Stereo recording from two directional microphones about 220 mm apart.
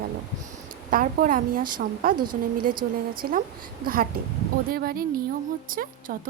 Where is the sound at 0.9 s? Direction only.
40° right (ahead or behind).